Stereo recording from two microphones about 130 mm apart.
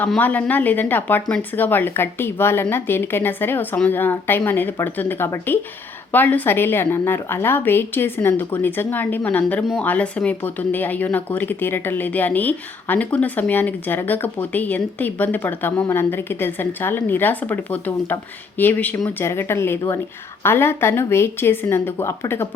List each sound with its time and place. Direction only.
0.2 s a woman's voice: 10° left (ahead or behind)